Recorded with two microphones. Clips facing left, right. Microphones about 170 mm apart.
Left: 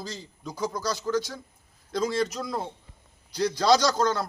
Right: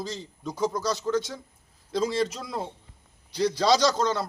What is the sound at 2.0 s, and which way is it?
Speech, 25° right (ahead or behind).